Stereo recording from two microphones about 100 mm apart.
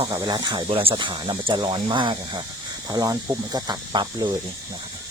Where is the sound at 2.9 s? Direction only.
35° right (ahead or behind).